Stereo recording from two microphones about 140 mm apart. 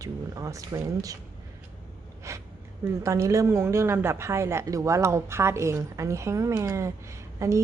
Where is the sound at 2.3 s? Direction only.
20° right (ahead or behind).